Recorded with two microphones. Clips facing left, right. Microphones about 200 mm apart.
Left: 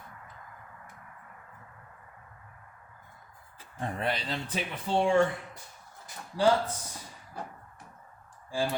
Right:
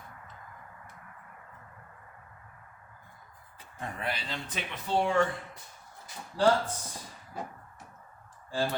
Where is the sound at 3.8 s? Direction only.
35° left (ahead or behind).